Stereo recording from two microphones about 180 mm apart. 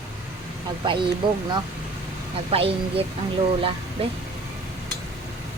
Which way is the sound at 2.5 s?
30° right (ahead or behind).